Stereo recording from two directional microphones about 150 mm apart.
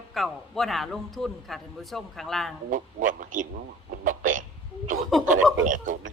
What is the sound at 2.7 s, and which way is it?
A man's voice, 60° right (ahead or behind).